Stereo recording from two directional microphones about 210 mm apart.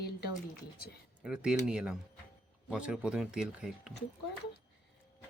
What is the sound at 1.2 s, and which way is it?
Speech, 5° right (ahead or behind).